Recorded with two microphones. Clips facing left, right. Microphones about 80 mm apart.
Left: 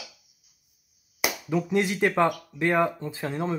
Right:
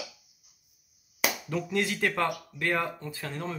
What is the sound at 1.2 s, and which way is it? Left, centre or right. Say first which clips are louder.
Speech: left 3 dB; centre.